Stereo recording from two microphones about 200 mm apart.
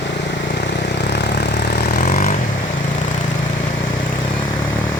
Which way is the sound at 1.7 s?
40° left (ahead or behind).